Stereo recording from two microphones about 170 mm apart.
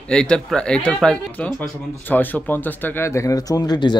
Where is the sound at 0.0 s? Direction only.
5° left (ahead or behind).